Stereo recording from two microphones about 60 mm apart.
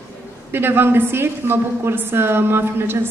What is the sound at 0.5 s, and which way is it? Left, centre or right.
A woman's voice, right.